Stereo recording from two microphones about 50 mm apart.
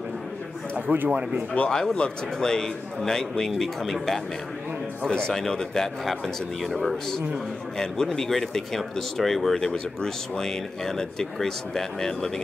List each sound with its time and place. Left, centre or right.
0.7 s speech: right
1.5 s speech: left
2.0 s speech: centre
7.7 s speech: centre